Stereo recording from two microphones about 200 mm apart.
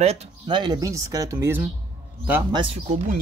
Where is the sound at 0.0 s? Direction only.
30° right (ahead or behind); by 1.7 s 10° right (ahead or behind).